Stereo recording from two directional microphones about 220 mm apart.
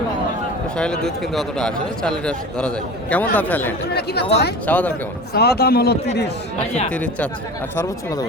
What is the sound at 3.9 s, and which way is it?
Speech, 45° left (ahead or behind).